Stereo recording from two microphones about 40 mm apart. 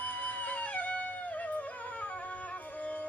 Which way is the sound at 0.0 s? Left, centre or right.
Left.